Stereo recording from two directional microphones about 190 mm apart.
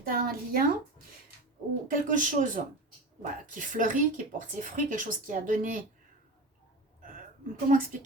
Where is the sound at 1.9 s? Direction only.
45° right (ahead or behind).